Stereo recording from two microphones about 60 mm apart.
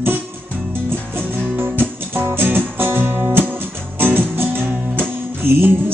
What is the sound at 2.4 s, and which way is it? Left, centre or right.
Music, right.